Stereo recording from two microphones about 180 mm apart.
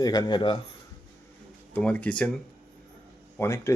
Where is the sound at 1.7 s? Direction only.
10° left (ahead or behind).